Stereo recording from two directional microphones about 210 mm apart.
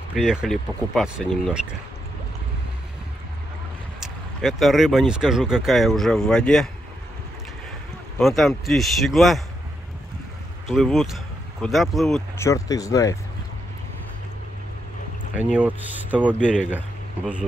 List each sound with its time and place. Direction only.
0.1 s speech: 5° right (ahead or behind)
4.4 s speech: centre (ahead or behind)
8.2 s speech: centre (ahead or behind)
10.7 s speech: centre (ahead or behind)
12.4 s speech: 15° left (ahead or behind)
15.3 s speech: 5° right (ahead or behind)